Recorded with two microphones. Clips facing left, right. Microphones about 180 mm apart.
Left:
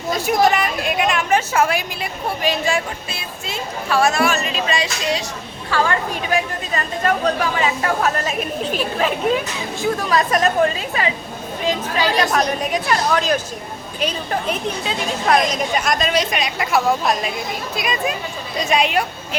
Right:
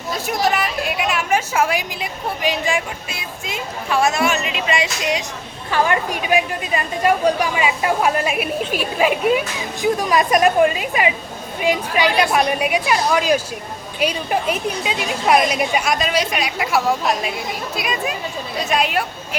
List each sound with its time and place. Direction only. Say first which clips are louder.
0.3 s a woman's voice: left 3 dB; 5° right (ahead or behind)
12.0 s a woman's voice: right 1 dB; 35° left (ahead or behind)
12.3 s a woman's voice: right 2 dB; 10° right (ahead or behind)